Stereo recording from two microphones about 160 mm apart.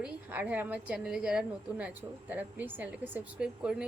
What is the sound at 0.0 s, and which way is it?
A woman's voice, 10° right (ahead or behind).